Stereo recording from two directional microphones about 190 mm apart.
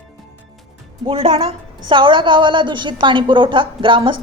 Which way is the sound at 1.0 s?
30° right (ahead or behind).